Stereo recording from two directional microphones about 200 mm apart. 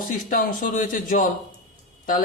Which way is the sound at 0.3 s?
45° left (ahead or behind).